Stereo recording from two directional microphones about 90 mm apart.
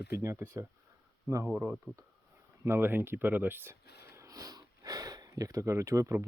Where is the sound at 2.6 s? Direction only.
25° right (ahead or behind).